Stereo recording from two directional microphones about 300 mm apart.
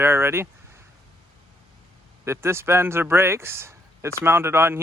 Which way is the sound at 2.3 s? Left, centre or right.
Centre.